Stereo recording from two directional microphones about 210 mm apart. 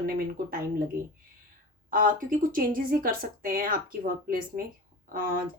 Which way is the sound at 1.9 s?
40° right (ahead or behind).